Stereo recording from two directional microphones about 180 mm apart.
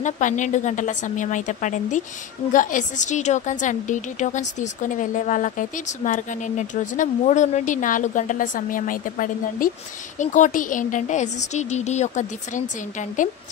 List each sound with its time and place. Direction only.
0.0 s a woman's voice: 45° left (ahead or behind)